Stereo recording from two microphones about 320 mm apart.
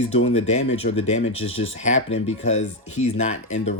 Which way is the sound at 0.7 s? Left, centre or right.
Left.